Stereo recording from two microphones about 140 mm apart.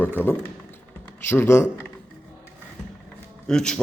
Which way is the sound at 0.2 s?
15° left (ahead or behind).